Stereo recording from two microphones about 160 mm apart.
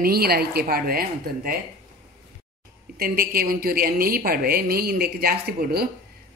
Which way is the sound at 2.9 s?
70° right (ahead or behind).